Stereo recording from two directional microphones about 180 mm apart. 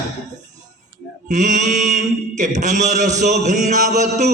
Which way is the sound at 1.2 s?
40° right (ahead or behind).